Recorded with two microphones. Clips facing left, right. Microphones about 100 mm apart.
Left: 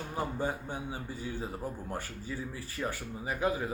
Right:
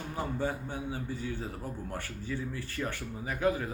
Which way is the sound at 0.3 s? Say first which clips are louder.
Right 1 dB; 15° left (ahead or behind).